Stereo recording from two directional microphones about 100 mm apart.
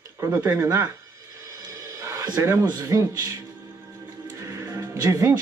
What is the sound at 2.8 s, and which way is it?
Speech, 40° right (ahead or behind).